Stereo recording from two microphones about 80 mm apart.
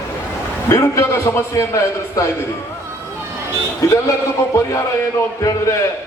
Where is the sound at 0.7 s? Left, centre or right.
Left.